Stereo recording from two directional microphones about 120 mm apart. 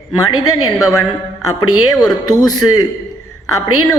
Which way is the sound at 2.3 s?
35° left (ahead or behind).